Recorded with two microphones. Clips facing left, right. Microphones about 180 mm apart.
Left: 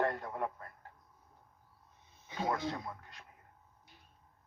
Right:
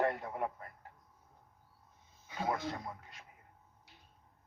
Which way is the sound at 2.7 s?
15° right (ahead or behind).